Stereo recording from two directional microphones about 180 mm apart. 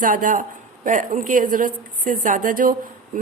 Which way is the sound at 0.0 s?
50° right (ahead or behind).